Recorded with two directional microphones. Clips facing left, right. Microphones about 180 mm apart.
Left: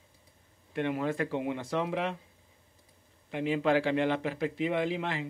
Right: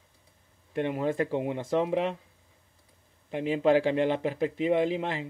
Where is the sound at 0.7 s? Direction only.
40° right (ahead or behind).